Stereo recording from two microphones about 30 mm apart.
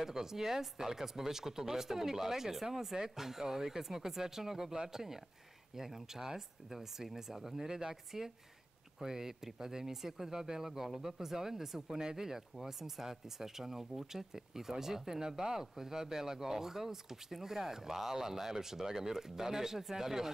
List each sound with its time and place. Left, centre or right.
0.0 s speech: centre